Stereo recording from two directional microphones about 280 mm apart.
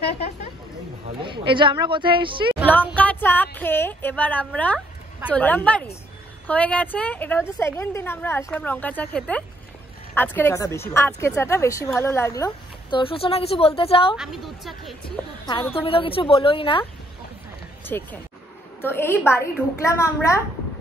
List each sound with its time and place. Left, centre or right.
1.2 s speech: centre
3.0 s a woman's voice: centre
14.1 s a woman's voice: centre
15.7 s a woman's voice: centre
17.8 s a woman's voice: centre